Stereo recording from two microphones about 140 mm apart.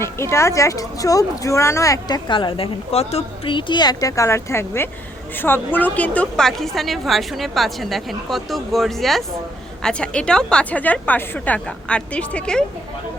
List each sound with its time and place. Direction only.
0.0 s a woman's voice: 20° left (ahead or behind)